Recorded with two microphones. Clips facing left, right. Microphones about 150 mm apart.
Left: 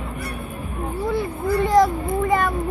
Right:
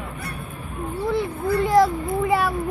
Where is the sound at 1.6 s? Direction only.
5° right (ahead or behind).